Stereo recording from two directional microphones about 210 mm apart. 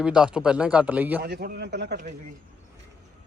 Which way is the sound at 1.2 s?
50° right (ahead or behind).